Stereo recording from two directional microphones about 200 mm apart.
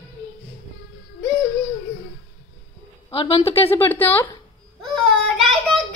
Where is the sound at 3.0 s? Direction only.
25° left (ahead or behind).